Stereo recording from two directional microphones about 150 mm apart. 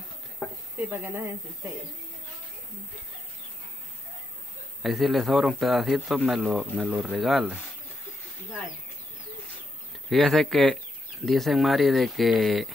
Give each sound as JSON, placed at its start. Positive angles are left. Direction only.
{"t": 0.7, "sound": "speech", "side_deg": -15}
{"t": 4.8, "sound": "speech", "side_deg": 0}
{"t": 10.0, "sound": "speech", "side_deg": 0}